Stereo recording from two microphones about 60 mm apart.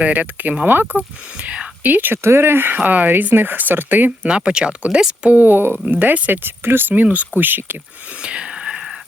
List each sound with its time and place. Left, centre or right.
0.0 s speech: right
1.4 s speech: right
2.1 s speech: right
2.7 s speech: right
4.2 s speech: centre
5.4 s speech: right
8.2 s whispering: centre